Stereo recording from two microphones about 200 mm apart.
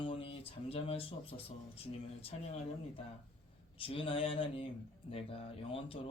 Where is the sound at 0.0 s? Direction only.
25° left (ahead or behind).